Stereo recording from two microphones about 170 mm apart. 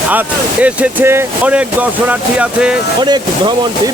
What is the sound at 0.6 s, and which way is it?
Speech, 10° right (ahead or behind).